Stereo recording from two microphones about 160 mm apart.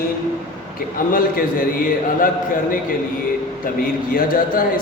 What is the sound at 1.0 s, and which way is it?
Speech, 60° left (ahead or behind).